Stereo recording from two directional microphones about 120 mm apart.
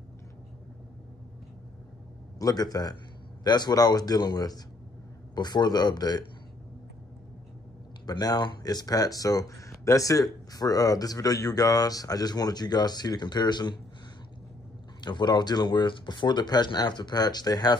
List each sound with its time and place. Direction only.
2.3 s speech: 30° left (ahead or behind)
8.1 s speech: 35° left (ahead or behind)
15.0 s speech: 40° left (ahead or behind)